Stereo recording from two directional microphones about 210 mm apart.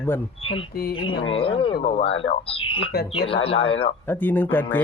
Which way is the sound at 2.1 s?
65° left (ahead or behind).